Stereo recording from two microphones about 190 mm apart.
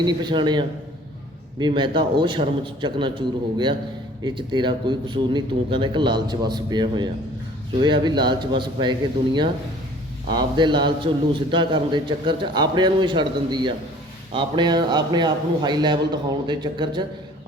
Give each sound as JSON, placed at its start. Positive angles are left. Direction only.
{"t": 0.0, "sound": "a man's voice", "side_deg": -25}